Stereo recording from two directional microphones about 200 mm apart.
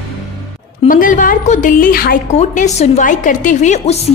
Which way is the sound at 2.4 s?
35° left (ahead or behind).